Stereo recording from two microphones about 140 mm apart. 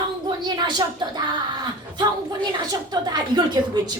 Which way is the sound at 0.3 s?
30° right (ahead or behind).